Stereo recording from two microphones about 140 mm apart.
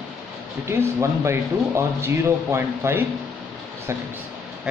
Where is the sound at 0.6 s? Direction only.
20° right (ahead or behind).